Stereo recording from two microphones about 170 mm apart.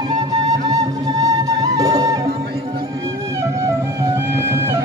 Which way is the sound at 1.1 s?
20° right (ahead or behind).